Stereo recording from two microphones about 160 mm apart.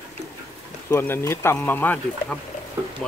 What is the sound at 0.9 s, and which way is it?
Speech, 15° left (ahead or behind).